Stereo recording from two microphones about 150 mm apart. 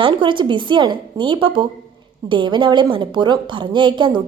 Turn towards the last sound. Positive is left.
turn(degrees=-30)  # may be behind; listen again after turning